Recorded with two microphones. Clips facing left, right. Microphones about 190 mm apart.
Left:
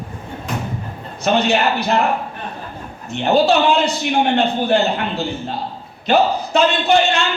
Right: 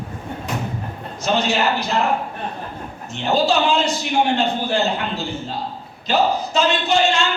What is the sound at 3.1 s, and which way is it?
Speech, 60° left (ahead or behind).